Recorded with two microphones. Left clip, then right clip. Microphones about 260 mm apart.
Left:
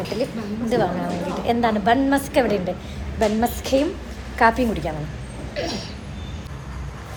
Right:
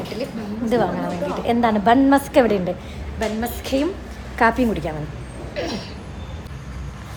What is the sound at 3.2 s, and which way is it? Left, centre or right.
Speech, centre.